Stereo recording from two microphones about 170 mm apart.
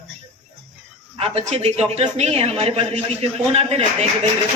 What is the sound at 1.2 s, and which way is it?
A man's voice, 40° right (ahead or behind).